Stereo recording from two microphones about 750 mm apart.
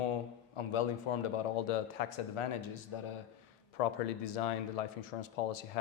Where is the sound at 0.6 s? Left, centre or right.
Left.